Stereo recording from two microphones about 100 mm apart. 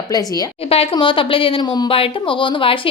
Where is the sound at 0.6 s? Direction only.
75° left (ahead or behind).